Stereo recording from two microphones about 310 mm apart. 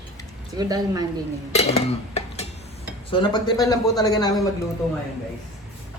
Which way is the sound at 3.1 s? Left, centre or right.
Centre.